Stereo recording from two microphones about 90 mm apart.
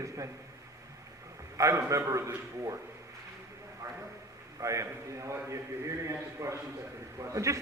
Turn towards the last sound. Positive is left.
turn(degrees=-35)  # may be behind; listen again after turning